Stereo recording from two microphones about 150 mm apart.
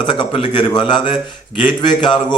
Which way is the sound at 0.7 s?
30° left (ahead or behind).